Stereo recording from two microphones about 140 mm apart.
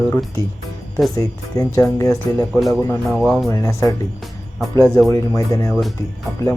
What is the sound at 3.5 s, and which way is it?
Speech, 20° left (ahead or behind).